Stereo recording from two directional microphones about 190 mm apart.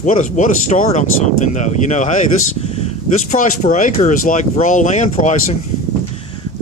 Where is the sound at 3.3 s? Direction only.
40° left (ahead or behind).